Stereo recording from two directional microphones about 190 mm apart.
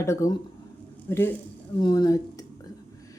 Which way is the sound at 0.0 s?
15° left (ahead or behind).